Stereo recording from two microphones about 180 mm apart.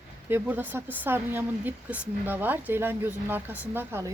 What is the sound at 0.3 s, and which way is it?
A woman's voice, 10° right (ahead or behind).